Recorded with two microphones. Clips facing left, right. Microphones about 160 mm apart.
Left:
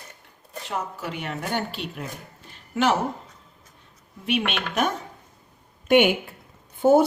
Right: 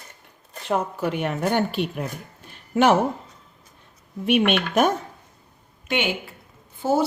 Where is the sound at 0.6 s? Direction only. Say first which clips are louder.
Right 7 dB; 55° right (ahead or behind).